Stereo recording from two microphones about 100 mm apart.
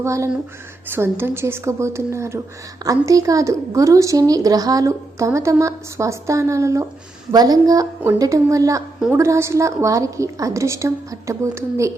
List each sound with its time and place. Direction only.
0.0 s a woman's voice: 30° right (ahead or behind)